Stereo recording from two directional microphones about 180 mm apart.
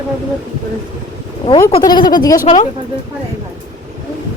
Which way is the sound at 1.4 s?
25° left (ahead or behind).